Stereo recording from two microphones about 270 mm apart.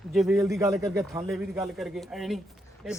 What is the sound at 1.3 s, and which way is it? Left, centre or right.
Speech, centre.